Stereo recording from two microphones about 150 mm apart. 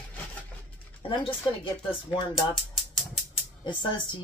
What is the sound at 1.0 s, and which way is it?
Speech, 35° left (ahead or behind).